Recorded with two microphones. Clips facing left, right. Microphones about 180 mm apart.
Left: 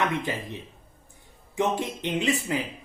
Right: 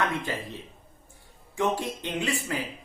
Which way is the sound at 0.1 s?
15° left (ahead or behind).